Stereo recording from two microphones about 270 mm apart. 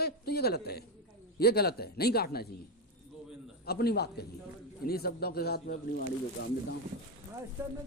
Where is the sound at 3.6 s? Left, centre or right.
Left.